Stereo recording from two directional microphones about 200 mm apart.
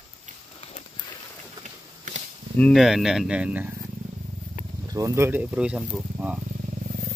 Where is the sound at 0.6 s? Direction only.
30° left (ahead or behind).